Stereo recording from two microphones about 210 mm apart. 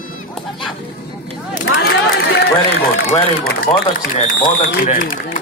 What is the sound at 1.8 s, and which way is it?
Run, 50° left (ahead or behind).